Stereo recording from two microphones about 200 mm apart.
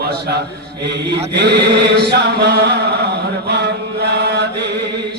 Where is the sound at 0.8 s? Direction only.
55° right (ahead or behind).